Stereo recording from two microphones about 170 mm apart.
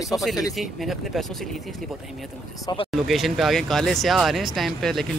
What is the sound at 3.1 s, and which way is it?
Speech, centre (ahead or behind).